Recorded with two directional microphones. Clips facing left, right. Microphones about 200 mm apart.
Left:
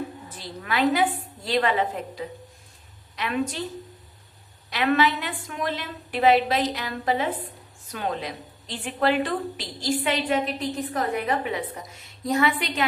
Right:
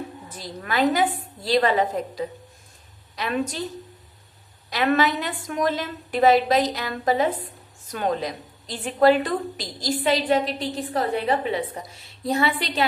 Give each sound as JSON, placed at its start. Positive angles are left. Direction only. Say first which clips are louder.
{"t": 0.3, "sound": "a woman's voice", "louder": "right 2 dB", "side_deg": -40}
{"t": 3.2, "sound": "a woman's voice", "louder": "right 1 dB", "side_deg": -40}
{"t": 4.7, "sound": "a woman's voice", "louder": "right 1 dB", "side_deg": -40}